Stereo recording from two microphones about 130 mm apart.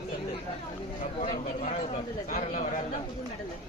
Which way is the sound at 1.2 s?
65° left (ahead or behind).